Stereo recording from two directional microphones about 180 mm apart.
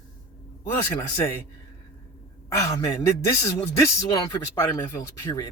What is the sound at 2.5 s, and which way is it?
Speech, 15° left (ahead or behind).